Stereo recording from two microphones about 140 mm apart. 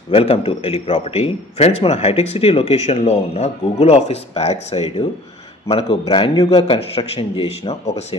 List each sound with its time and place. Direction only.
0.1 s a man's voice: 45° left (ahead or behind)
5.7 s a man's voice: 35° left (ahead or behind)